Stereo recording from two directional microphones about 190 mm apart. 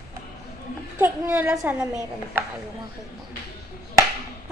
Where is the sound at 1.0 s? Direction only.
10° right (ahead or behind).